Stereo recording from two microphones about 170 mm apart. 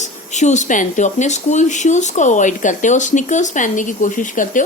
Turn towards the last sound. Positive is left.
turn(degrees=50)  # may be behind; listen again after turning